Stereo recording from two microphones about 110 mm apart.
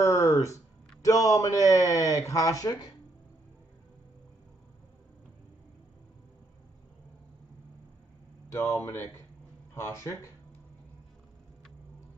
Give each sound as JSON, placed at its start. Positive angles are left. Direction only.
{"t": 0.0, "sound": "a sound", "side_deg": 30}
{"t": 1.0, "sound": "speech", "side_deg": 30}
{"t": 8.5, "sound": "speech", "side_deg": 25}